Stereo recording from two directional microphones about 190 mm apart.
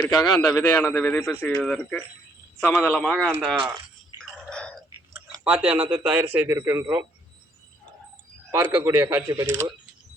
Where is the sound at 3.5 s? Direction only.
25° right (ahead or behind).